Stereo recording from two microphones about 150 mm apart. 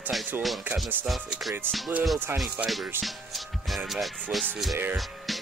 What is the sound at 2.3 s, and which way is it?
Speech, 15° right (ahead or behind).